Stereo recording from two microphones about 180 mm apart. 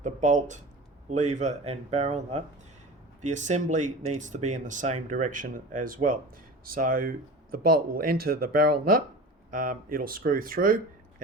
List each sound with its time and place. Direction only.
0.0 s speech: 45° right (ahead or behind)